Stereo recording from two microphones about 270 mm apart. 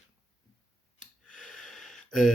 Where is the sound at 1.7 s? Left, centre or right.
Centre.